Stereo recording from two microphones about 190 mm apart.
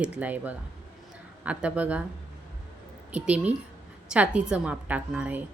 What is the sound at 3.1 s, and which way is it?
A woman's voice, 5° right (ahead or behind).